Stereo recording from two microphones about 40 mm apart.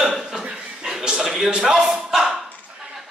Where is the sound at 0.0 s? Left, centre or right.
Centre.